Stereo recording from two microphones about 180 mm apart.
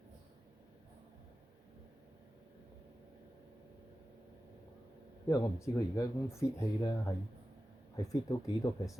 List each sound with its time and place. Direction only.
5.3 s speech: 15° left (ahead or behind)